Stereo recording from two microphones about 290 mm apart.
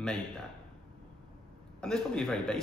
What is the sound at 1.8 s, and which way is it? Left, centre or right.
Speech, centre.